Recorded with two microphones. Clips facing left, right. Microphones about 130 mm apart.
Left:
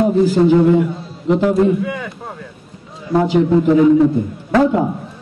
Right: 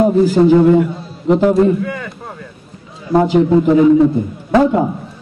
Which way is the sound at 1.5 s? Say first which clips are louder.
Right 2 dB; 5° left (ahead or behind).